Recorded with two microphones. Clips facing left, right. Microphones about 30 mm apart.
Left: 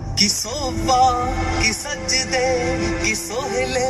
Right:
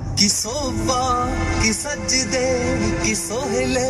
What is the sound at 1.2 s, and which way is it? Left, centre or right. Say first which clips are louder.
Music: even; centre.